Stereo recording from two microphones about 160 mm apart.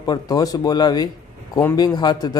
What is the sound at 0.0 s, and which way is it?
A man's voice, 25° left (ahead or behind).